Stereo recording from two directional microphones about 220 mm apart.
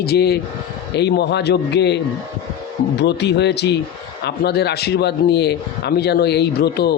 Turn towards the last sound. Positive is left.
turn(degrees=50)  # may be behind; listen again after turning